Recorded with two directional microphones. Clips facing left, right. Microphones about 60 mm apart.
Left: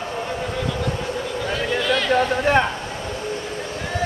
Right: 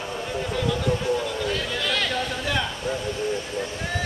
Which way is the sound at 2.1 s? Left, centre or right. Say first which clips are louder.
Left 9 dB; left.